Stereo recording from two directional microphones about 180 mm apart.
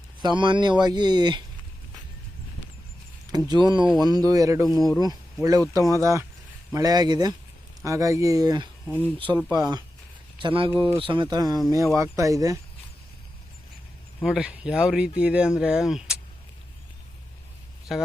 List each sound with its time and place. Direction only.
0.2 s speech: 25° right (ahead or behind)
3.3 s speech: 20° right (ahead or behind)
4.6 s speech: centre (ahead or behind)
4.9 s speech: 20° right (ahead or behind)
14.3 s speech: 5° right (ahead or behind)
17.9 s speech: centre (ahead or behind)